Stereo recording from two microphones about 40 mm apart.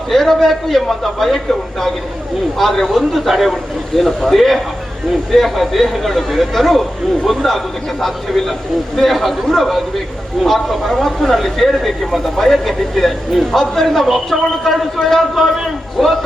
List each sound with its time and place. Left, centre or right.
0.1 s speech: centre
2.6 s speech: centre